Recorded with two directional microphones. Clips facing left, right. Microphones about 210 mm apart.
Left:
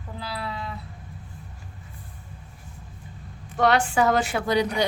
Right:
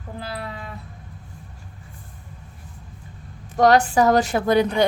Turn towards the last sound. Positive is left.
turn(degrees=-55)  # may be behind; listen again after turning